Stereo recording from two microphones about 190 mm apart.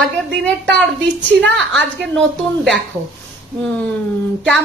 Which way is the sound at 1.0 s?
70° right (ahead or behind).